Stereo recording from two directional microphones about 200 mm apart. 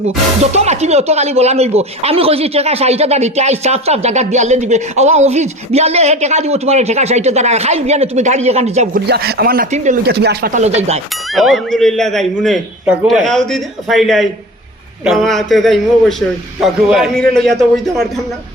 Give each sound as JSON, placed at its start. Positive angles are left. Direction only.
{"t": 0.5, "sound": "speech", "side_deg": -35}
{"t": 9.0, "sound": "speech", "side_deg": -50}
{"t": 9.7, "sound": "speech", "side_deg": -40}
{"t": 10.1, "sound": "speech", "side_deg": -55}
{"t": 10.5, "sound": "speech", "side_deg": -35}
{"t": 11.3, "sound": "a man's voice", "side_deg": 0}